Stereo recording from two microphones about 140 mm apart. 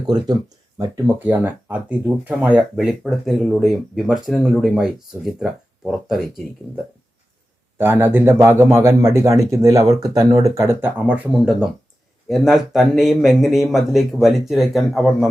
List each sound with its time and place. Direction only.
0.1 s speech: 30° right (ahead or behind)
1.0 s speech: 10° right (ahead or behind)
7.8 s speech: 15° right (ahead or behind)